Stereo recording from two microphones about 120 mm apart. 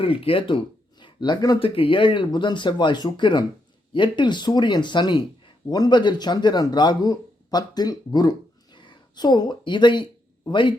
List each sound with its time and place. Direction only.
0.0 s speech: 50° left (ahead or behind)
1.5 s speech: 50° left (ahead or behind)
8.7 s a sound: 40° left (ahead or behind)